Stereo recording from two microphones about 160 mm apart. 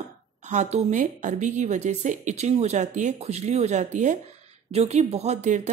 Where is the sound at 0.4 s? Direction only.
50° right (ahead or behind).